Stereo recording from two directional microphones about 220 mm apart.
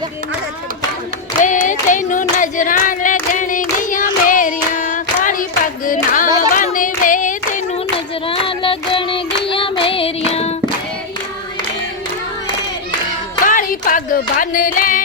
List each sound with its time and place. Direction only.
1.4 s clapping: 35° left (ahead or behind)
1.9 s singing: 35° left (ahead or behind)
6.6 s clapping: 35° left (ahead or behind)
7.9 s child singing: 25° left (ahead or behind)
13.4 s music: 35° left (ahead or behind)